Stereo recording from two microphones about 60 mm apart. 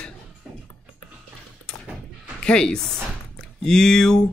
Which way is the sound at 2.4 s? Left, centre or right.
Centre.